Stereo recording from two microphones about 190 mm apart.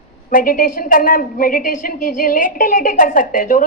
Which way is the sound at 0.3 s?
45° left (ahead or behind).